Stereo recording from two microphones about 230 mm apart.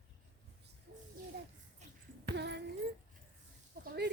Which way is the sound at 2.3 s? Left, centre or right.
Right.